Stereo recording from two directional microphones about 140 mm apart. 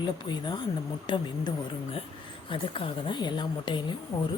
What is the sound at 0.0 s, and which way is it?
Speech, 30° left (ahead or behind).